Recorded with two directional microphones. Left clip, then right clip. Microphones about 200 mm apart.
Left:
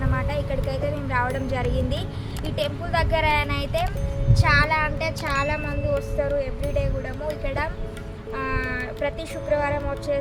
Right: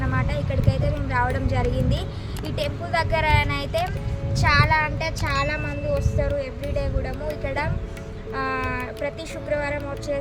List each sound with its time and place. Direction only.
0.0 s speech: centre (ahead or behind)